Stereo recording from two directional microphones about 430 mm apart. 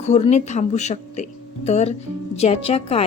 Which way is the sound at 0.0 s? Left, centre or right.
Centre.